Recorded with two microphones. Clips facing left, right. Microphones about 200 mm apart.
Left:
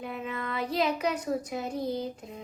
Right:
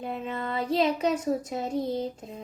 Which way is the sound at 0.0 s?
25° right (ahead or behind).